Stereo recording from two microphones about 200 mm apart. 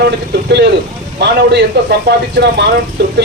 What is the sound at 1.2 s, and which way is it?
Speech, 55° right (ahead or behind).